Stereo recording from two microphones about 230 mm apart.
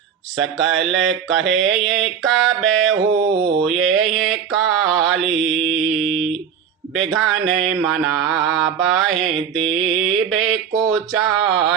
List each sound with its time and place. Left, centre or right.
0.3 s mantra: centre
3.1 s mantra: right
3.6 s mantra: centre